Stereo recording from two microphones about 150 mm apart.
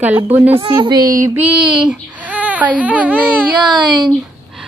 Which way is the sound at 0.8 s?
30° right (ahead or behind).